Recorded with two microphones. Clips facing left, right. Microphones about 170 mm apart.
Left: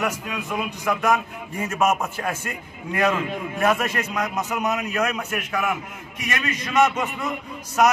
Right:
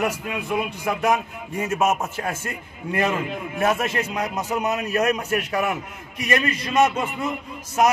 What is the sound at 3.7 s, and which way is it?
A man's voice, 25° right (ahead or behind).